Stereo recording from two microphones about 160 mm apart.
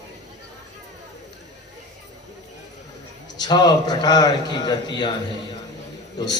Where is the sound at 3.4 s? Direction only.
25° left (ahead or behind).